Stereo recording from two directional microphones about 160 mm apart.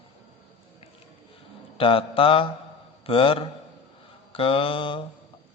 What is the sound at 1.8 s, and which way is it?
Mantra, 35° left (ahead or behind).